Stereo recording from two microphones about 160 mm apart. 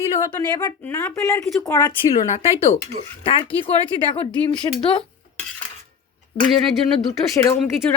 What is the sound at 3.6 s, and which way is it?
Speech, 35° left (ahead or behind).